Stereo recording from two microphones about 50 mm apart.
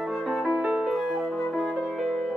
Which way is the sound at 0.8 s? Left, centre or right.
Centre.